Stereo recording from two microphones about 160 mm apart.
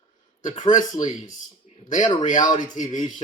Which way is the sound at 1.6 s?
45° left (ahead or behind).